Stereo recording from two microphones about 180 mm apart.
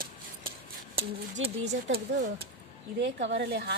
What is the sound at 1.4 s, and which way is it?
Speech, 90° right.